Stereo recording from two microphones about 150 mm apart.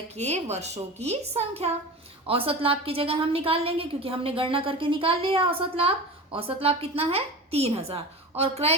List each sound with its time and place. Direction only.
0.2 s a woman's voice: 45° right (ahead or behind)